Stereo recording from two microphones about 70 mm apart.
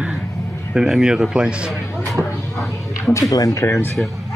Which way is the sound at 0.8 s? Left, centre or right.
Centre.